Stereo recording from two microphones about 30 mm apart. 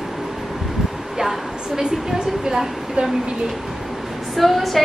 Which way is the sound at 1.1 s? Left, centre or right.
Centre.